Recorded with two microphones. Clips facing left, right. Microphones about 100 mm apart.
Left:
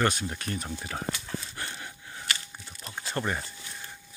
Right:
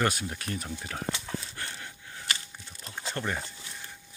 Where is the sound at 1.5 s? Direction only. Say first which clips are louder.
Left 2 dB; 15° left (ahead or behind).